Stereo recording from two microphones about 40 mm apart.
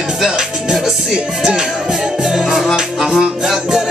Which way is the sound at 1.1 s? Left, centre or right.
Centre.